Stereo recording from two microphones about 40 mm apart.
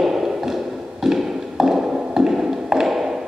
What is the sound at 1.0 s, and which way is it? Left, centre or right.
Tap, centre.